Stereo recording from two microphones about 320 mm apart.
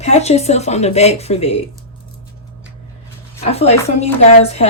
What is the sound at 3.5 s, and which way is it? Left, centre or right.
Speech, centre.